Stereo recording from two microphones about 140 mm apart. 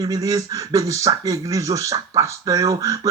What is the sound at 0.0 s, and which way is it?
Speech, 25° right (ahead or behind).